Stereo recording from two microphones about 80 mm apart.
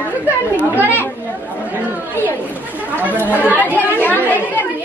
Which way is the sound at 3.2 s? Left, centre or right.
Left.